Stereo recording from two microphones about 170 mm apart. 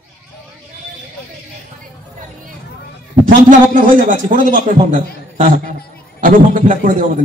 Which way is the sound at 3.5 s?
50° right (ahead or behind).